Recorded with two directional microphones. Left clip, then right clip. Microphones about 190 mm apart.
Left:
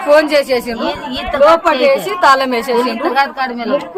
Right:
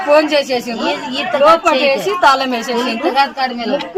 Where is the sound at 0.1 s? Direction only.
20° left (ahead or behind).